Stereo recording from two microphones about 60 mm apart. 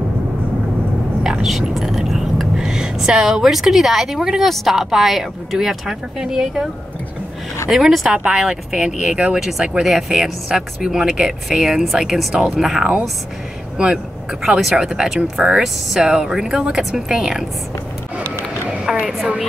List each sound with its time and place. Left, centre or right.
1.2 s whispering: centre
4.5 s speech: centre
7.7 s speech: centre
14.4 s speech: centre
18.7 s a sound: centre